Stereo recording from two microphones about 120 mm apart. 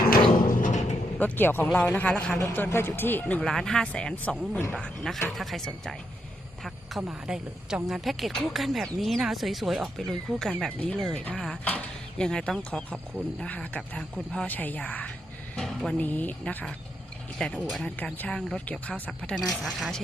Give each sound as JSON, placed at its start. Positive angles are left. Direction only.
{"t": 0.6, "sound": "timpani", "side_deg": 85}
{"t": 1.2, "sound": "speech", "side_deg": 15}
{"t": 2.5, "sound": "speech", "side_deg": 20}